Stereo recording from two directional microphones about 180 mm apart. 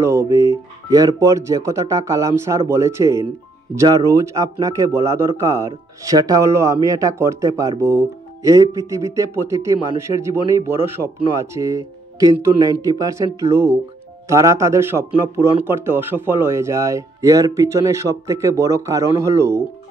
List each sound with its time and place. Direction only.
0.0 s speech: 15° right (ahead or behind)